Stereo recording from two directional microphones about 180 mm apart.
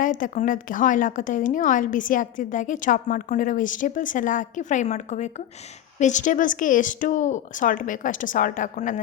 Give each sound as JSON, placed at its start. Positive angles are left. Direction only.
{"t": 0.0, "sound": "a woman's voice", "side_deg": 45}